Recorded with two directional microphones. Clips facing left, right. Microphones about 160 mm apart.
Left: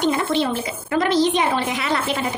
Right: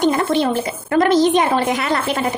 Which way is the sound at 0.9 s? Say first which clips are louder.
Right 4 dB; 50° right (ahead or behind).